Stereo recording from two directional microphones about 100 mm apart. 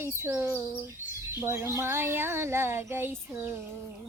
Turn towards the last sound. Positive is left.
turn(degrees=-25)  # may be behind; listen again after turning